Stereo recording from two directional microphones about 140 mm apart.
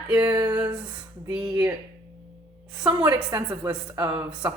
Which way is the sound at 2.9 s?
30° right (ahead or behind).